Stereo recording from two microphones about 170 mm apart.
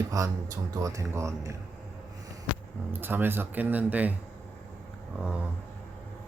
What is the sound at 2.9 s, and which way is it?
Speech, 10° right (ahead or behind).